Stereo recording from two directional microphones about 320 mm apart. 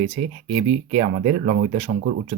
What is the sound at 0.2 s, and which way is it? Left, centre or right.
Speech, right.